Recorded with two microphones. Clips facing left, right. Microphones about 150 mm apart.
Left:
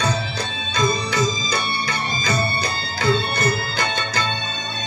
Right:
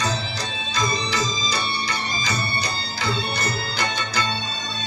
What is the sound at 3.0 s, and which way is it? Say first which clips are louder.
Music: left 6 dB; 50° left (ahead or behind).